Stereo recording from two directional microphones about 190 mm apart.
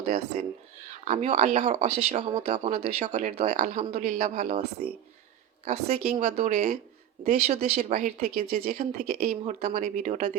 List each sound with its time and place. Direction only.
1.0 s speech: 40° right (ahead or behind)
5.6 s speech: 35° right (ahead or behind)